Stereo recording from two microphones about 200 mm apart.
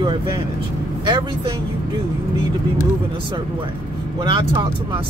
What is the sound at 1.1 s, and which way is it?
Speech, 25° right (ahead or behind).